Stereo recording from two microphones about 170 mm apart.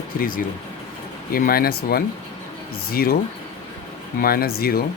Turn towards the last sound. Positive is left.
turn(degrees=65)  # may be behind; listen again after turning